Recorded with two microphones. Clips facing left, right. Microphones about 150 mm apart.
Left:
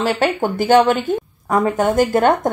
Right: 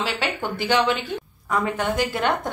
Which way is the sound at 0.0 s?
45° left (ahead or behind).